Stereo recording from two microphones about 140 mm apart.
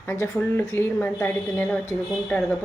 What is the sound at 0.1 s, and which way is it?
Speech, 20° left (ahead or behind).